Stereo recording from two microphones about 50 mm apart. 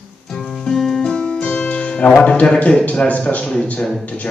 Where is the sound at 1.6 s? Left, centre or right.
Left.